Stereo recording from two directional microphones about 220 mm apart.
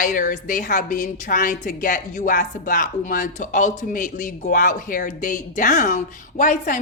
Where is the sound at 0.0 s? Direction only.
40° left (ahead or behind).